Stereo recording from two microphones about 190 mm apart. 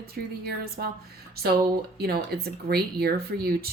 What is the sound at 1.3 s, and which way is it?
Speech, 55° right (ahead or behind).